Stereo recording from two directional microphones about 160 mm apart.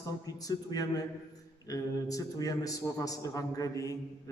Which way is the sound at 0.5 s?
25° left (ahead or behind).